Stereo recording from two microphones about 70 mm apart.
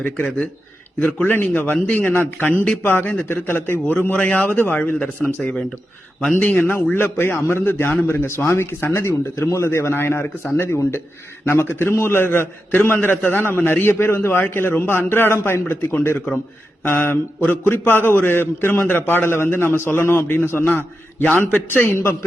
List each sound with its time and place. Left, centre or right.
0.9 s a man's voice: left
6.4 s a man's voice: left